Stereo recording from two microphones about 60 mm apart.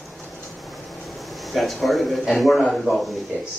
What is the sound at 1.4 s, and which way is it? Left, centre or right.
Speech, centre.